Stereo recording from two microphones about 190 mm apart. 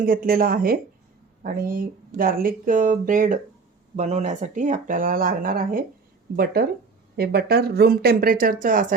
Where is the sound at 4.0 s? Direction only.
35° right (ahead or behind).